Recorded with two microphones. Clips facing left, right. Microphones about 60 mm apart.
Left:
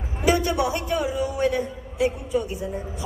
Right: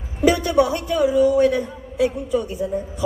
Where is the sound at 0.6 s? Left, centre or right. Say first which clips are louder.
Right 5 dB; left.